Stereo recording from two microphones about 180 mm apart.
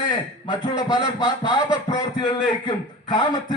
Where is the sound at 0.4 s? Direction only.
25° left (ahead or behind).